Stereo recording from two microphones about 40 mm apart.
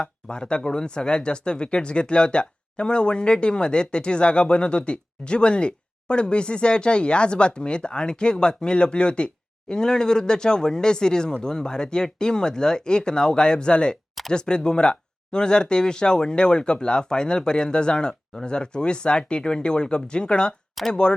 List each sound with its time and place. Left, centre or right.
0.0 s speech: left